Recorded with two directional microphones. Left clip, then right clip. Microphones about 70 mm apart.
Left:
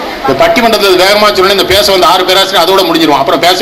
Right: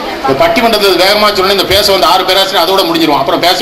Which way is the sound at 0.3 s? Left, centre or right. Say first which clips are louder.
Left 2 dB; left.